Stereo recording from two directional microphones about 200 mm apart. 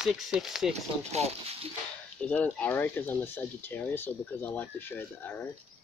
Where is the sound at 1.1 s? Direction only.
30° right (ahead or behind).